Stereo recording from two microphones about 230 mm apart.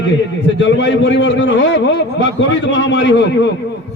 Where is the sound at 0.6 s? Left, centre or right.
Left.